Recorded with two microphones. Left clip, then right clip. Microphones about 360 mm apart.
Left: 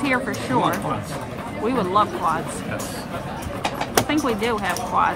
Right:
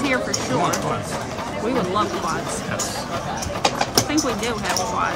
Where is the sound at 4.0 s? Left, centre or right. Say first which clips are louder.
Left 4 dB; centre.